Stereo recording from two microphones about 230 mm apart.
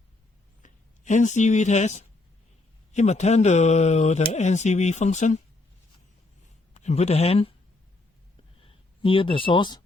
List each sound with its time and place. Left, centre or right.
0.6 s speech: left
6.7 s speech: left
8.6 s speech: left